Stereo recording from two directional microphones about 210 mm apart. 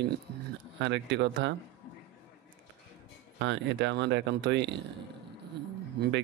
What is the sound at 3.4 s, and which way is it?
Speech, 60° right (ahead or behind).